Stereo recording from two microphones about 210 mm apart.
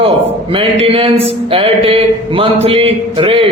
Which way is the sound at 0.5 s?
25° right (ahead or behind).